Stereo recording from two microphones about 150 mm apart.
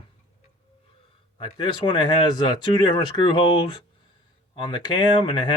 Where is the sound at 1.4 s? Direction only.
30° left (ahead or behind).